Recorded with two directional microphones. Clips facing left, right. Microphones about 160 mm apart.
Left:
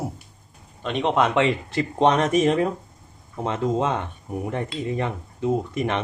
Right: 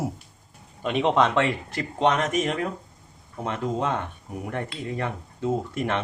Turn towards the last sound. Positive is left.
turn(degrees=20)  # may be behind; listen again after turning